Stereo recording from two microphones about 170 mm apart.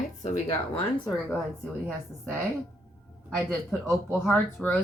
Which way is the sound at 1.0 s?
5° left (ahead or behind).